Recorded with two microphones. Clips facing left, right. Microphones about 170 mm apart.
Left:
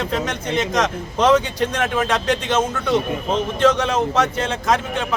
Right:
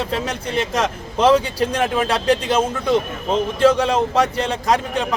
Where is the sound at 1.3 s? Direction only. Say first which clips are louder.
Right 1 dB; 30° right (ahead or behind).